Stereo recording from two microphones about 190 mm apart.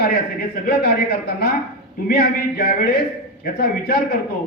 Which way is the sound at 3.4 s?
50° left (ahead or behind).